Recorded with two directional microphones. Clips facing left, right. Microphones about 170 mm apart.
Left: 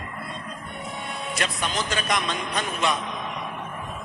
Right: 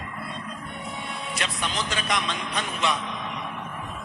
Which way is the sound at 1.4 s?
45° left (ahead or behind).